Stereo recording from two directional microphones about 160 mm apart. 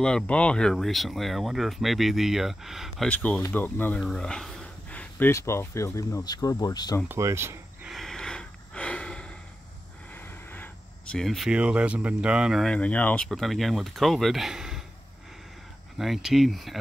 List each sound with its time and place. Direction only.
0.0 s speech: 5° left (ahead or behind); by 7.0 s 25° left (ahead or behind)
7.1 s speech: 15° right (ahead or behind)
7.8 s snort: centre (ahead or behind)
10.1 s speech: 10° left (ahead or behind)
16.0 s speech: centre (ahead or behind)